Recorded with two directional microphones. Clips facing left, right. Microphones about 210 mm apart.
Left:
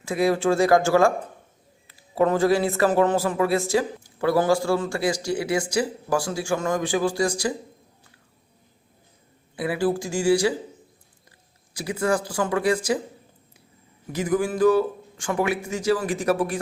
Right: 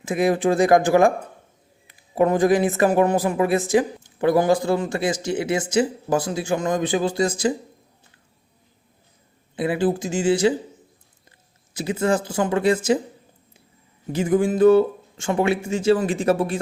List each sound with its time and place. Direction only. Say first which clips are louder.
0.0 s a man's voice: right 2 dB; 20° right (ahead or behind)
9.6 s a man's voice: right 2 dB; 20° right (ahead or behind)
14.1 s a man's voice: right 4 dB; 25° right (ahead or behind)